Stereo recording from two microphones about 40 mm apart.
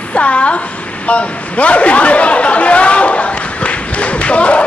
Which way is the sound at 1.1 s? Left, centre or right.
Left.